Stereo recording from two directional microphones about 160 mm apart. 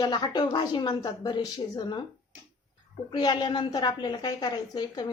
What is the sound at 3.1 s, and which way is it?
Speech, 25° left (ahead or behind).